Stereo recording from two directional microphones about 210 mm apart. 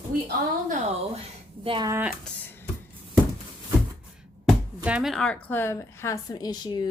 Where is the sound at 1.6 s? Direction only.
20° right (ahead or behind).